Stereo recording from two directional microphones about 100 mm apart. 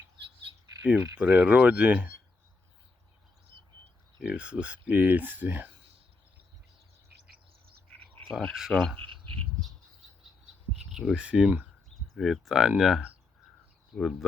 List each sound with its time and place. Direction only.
0.8 s speech: 15° right (ahead or behind)
3.5 s bird: 60° right (ahead or behind)
4.2 s speech: 10° right (ahead or behind)
7.9 s a sound: 15° left (ahead or behind)
8.7 s speech: centre (ahead or behind)
9.1 s a sound: centre (ahead or behind)
10.8 s speech: 5° right (ahead or behind)
12.1 s speech: centre (ahead or behind)